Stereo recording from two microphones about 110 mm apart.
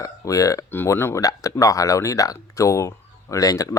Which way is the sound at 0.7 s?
20° left (ahead or behind).